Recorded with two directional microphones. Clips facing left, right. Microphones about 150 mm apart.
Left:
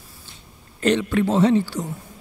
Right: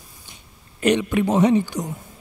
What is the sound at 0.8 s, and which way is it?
A man's voice, 15° right (ahead or behind).